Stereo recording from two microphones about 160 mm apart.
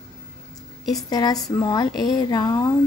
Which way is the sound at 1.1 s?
25° left (ahead or behind).